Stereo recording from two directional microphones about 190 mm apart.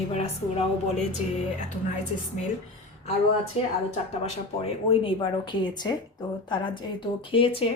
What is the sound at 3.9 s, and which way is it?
A woman's voice, 35° left (ahead or behind).